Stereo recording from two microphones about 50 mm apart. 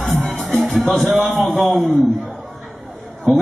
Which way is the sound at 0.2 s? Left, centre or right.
Centre.